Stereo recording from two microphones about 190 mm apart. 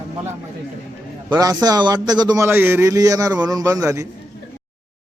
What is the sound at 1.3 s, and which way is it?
A man's voice, 20° right (ahead or behind).